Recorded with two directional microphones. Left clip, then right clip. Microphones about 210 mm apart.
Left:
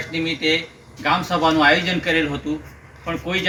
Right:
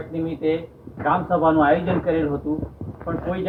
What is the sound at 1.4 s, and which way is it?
Speech, 30° left (ahead or behind).